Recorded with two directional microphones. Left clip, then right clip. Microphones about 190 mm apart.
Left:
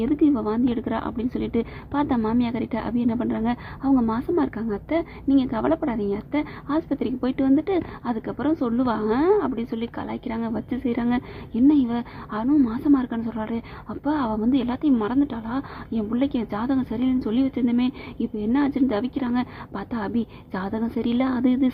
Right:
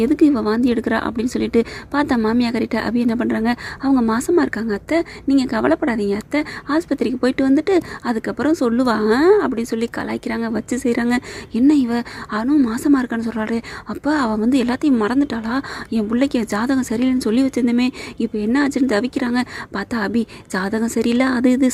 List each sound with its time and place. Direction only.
0.0 s a woman's voice: 25° right (ahead or behind)